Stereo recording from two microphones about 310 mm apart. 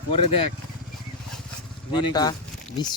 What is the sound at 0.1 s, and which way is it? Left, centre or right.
Speech, centre.